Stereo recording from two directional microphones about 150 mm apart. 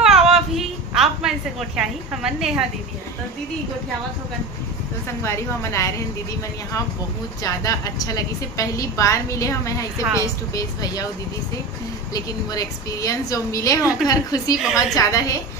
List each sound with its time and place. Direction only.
0.0 s a sound: 5° right (ahead or behind)
1.8 s a woman's voice: 5° right (ahead or behind)
5.2 s a woman's voice: 20° left (ahead or behind)
7.4 s a woman's voice: 25° left (ahead or behind)
12.1 s a woman's voice: 25° left (ahead or behind)
14.6 s a woman's voice: 5° right (ahead or behind)
15.0 s a woman's voice: 20° left (ahead or behind)